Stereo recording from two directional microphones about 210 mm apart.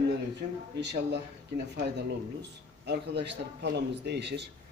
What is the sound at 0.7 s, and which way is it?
Speech, 55° right (ahead or behind).